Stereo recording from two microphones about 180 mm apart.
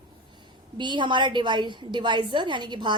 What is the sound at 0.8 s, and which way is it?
A woman's voice, 25° right (ahead or behind).